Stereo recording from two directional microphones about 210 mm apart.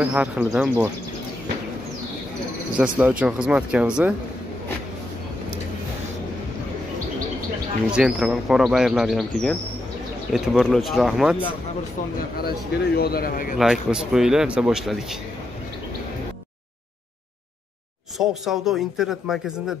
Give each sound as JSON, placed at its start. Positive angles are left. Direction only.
{"t": 0.0, "sound": "speech", "side_deg": -5}
{"t": 2.8, "sound": "speech", "side_deg": -5}
{"t": 7.9, "sound": "speech", "side_deg": -5}
{"t": 12.4, "sound": "a man's voice", "side_deg": 45}
{"t": 13.6, "sound": "speech", "side_deg": -5}
{"t": 18.1, "sound": "speech", "side_deg": 0}